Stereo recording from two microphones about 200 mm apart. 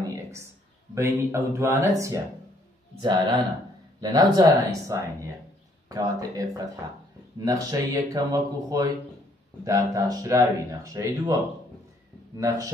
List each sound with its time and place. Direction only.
0.9 s speech: 15° right (ahead or behind)
12.4 s speech: 15° right (ahead or behind)